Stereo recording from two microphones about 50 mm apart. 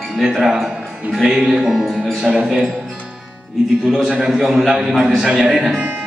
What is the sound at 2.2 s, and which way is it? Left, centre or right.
Speech, centre.